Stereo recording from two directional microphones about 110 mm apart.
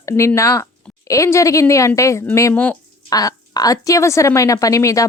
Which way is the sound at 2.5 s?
15° left (ahead or behind).